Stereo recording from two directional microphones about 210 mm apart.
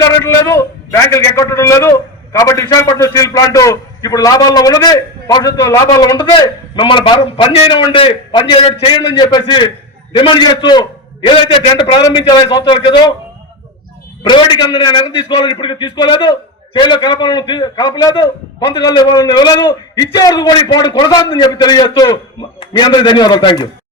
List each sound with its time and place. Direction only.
0.0 s a man's voice: 15° left (ahead or behind)
14.3 s a man's voice: 20° left (ahead or behind)